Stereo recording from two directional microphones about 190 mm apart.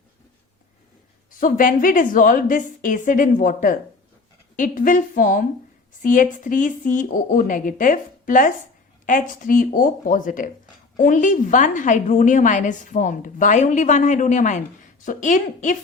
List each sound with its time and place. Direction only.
1.3 s a woman's voice: 45° left (ahead or behind)